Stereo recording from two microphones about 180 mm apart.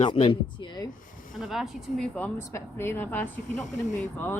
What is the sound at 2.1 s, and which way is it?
Speech, 10° left (ahead or behind).